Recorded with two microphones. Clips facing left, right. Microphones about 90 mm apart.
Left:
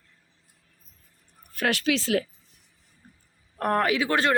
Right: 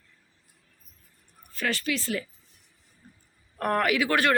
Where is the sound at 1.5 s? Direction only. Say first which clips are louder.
Left 4 dB; 65° left (ahead or behind); by 2.2 s 90° left.